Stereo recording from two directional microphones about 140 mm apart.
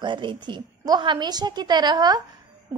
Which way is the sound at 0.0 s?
35° right (ahead or behind).